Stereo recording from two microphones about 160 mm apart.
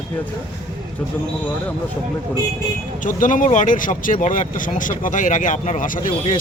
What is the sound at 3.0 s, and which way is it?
Speech, 55° left (ahead or behind).